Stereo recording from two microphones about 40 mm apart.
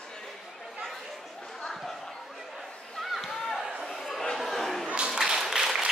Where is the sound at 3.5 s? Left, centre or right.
Centre.